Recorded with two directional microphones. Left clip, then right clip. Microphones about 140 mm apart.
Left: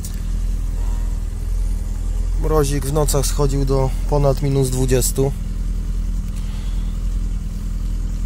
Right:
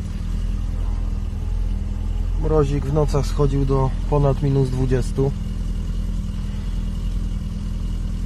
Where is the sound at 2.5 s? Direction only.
30° left (ahead or behind).